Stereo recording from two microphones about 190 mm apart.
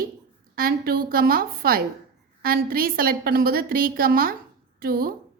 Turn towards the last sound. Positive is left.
turn(degrees=-55)  # may be behind; listen again after turning